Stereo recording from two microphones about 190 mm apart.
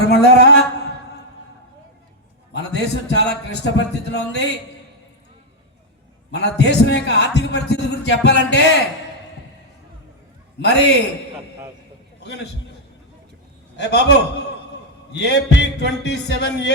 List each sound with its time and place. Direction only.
0.0 s speech: 60° left (ahead or behind)
2.5 s a man's voice: 60° left (ahead or behind)
6.3 s a man's voice: 60° left (ahead or behind)
10.6 s a man's voice: 65° left (ahead or behind)
13.7 s a man's voice: 65° left (ahead or behind)